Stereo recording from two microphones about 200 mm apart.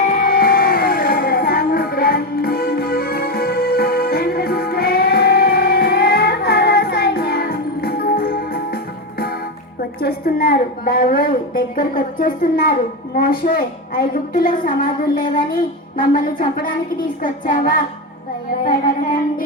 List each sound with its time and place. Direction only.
0.1 s music: 45° left (ahead or behind)
10.0 s a woman's voice: 50° left (ahead or behind)
16.0 s a woman's voice: 45° left (ahead or behind)